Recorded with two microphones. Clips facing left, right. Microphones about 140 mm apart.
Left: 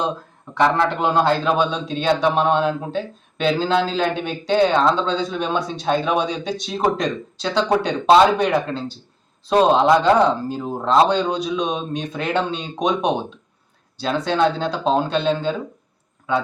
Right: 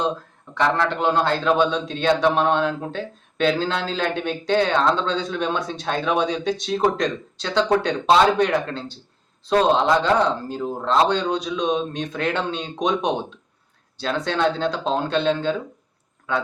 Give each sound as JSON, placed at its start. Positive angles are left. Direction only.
{"t": 0.5, "sound": "a man's voice", "side_deg": 10}